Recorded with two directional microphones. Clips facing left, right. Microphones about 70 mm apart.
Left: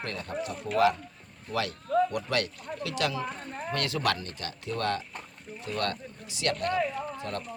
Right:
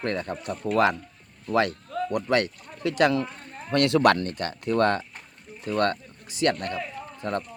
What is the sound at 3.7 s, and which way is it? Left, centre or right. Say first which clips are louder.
Speech: right 10 dB; right.